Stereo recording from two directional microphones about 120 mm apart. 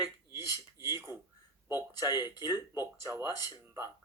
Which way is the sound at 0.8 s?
20° right (ahead or behind).